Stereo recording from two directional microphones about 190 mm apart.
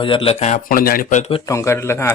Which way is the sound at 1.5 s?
15° left (ahead or behind).